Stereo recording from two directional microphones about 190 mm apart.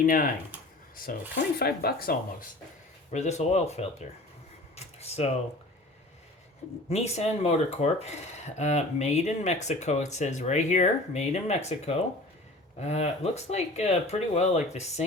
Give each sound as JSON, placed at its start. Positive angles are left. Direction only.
{"t": 0.0, "sound": "speech", "side_deg": 45}
{"t": 1.4, "sound": "speech", "side_deg": 55}
{"t": 3.1, "sound": "speech", "side_deg": 35}
{"t": 6.9, "sound": "speech", "side_deg": 35}